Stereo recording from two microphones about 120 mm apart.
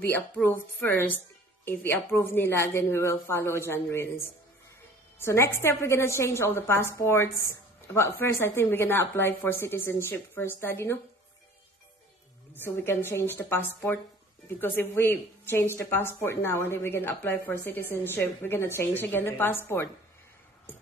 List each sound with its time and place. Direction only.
0.0 s a woman's voice: 15° left (ahead or behind)
12.5 s a woman's voice: 20° left (ahead or behind)